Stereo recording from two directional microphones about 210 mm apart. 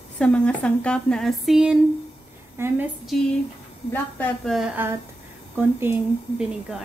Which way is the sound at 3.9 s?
10° left (ahead or behind).